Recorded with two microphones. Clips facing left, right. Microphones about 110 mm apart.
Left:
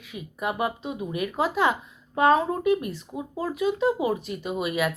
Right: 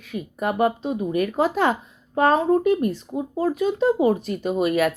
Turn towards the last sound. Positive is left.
turn(degrees=-50)  # may be behind; listen again after turning